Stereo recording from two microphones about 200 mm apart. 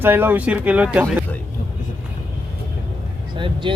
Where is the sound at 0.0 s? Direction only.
10° right (ahead or behind).